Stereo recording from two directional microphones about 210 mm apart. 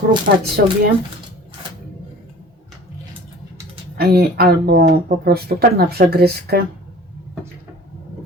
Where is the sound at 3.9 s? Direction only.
50° right (ahead or behind).